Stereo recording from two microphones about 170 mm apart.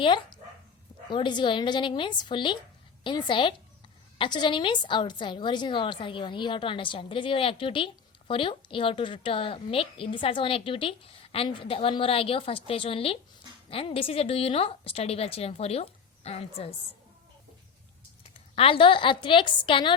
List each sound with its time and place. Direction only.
1.1 s a woman's voice: 25° left (ahead or behind)
18.5 s a woman's voice: 30° left (ahead or behind)